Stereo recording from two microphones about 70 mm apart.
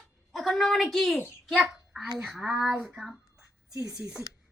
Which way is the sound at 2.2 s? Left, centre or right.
Centre.